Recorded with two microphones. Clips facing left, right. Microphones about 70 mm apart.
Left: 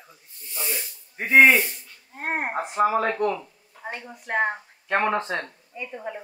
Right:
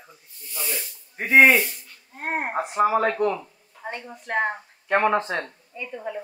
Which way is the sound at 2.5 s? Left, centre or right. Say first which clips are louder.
Right 1 dB; centre.